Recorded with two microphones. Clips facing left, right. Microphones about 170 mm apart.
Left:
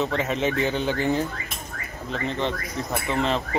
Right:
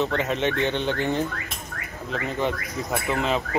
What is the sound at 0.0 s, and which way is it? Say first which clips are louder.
A man's voice: even; centre (ahead or behind).